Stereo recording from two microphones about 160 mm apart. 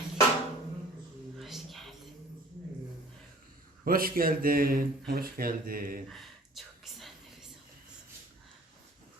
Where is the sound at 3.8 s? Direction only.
65° right (ahead or behind).